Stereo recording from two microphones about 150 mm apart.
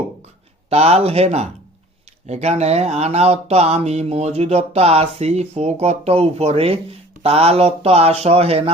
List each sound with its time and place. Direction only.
0.7 s speech: 45° right (ahead or behind)